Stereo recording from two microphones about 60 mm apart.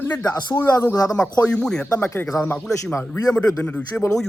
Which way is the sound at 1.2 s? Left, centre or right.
Centre.